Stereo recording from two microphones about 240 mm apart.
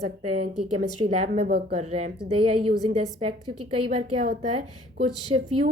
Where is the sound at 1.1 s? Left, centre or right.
Right.